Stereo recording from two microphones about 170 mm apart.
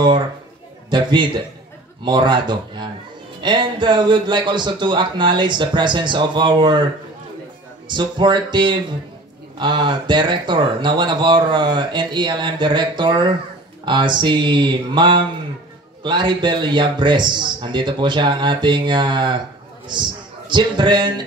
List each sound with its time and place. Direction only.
0.8 s a man's voice: 25° right (ahead or behind)
7.9 s a man's voice: 25° right (ahead or behind)